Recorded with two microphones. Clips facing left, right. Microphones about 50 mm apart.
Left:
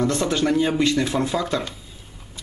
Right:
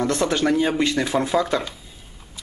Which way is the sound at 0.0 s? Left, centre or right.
Right.